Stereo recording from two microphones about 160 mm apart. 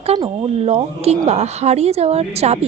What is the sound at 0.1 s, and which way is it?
Speech, 40° right (ahead or behind).